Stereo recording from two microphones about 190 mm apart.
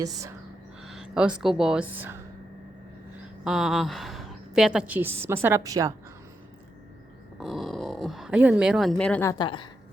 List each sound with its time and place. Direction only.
0.8 s speech: 5° right (ahead or behind)
3.4 s a woman's voice: centre (ahead or behind); by 5.9 s 15° right (ahead or behind)
7.3 s speech: centre (ahead or behind)
9.4 s a woman's voice: 25° left (ahead or behind)